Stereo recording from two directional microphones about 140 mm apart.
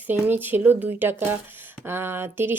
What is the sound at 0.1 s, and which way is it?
Speech, 15° right (ahead or behind).